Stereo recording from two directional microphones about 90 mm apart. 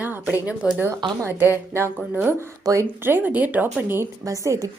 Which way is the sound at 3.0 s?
20° right (ahead or behind).